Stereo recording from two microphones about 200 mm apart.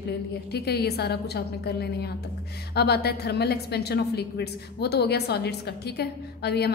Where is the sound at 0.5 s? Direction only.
55° left (ahead or behind).